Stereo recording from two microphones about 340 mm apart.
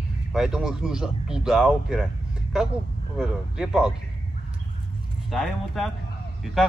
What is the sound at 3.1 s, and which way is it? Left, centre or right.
Speech, centre.